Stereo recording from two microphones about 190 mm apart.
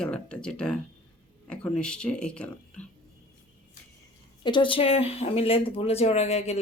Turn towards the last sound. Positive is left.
turn(degrees=35)  # may be behind; listen again after turning